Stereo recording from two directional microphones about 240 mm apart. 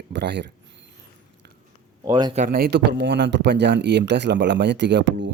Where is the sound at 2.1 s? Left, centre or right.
Centre.